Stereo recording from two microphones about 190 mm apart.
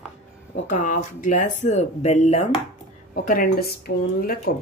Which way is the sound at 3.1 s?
50° left (ahead or behind).